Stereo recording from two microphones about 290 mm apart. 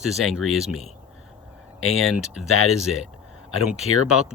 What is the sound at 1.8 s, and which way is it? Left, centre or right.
Speech, left.